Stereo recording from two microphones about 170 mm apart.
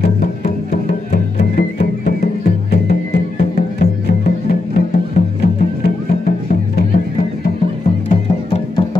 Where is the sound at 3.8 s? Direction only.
70° left (ahead or behind).